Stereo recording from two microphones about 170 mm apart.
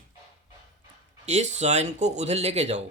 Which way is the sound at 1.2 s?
40° right (ahead or behind).